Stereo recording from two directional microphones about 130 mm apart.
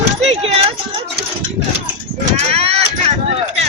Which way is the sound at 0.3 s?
50° right (ahead or behind).